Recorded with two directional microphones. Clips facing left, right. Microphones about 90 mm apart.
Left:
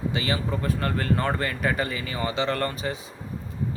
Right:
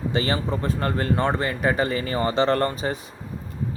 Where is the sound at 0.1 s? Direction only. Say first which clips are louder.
Right 3 dB; 35° right (ahead or behind).